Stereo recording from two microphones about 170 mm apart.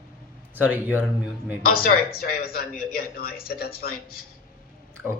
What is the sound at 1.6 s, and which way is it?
Speech, 60° left (ahead or behind).